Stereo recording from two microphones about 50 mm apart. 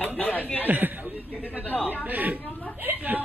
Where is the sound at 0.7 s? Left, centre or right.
Right.